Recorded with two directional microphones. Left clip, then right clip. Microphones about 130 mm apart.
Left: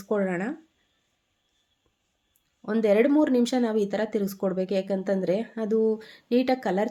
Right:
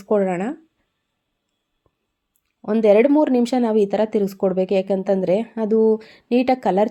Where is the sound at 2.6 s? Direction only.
25° right (ahead or behind).